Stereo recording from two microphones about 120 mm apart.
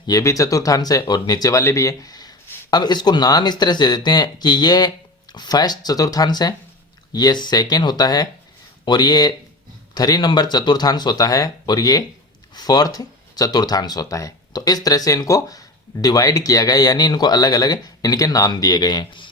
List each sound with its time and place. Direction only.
0.1 s speech: 25° left (ahead or behind)